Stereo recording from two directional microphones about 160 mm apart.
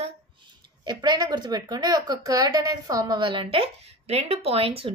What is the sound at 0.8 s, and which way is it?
A woman's voice, 25° right (ahead or behind).